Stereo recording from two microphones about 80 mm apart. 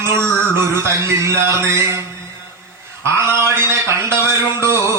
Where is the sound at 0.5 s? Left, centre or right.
Right.